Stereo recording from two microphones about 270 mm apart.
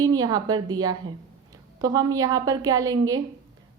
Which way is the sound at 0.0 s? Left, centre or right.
Centre.